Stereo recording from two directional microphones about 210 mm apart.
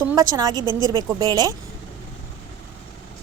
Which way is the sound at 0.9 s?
15° right (ahead or behind).